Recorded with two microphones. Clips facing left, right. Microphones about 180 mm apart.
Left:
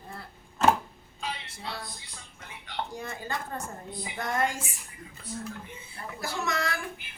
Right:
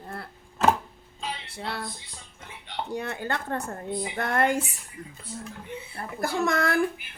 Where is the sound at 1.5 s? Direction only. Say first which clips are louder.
Right 5 dB; 65° right (ahead or behind).